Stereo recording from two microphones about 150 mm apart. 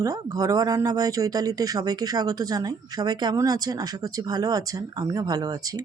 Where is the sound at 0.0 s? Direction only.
25° right (ahead or behind).